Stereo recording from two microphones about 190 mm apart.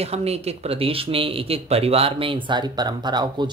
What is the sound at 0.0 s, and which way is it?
Speech, 35° right (ahead or behind).